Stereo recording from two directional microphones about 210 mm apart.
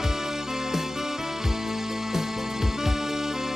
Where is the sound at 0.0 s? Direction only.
Centre (ahead or behind).